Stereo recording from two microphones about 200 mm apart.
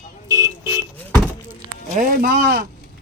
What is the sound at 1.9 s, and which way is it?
Speech, 45° right (ahead or behind).